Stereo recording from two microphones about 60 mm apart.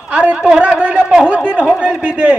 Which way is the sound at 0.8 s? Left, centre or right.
Right.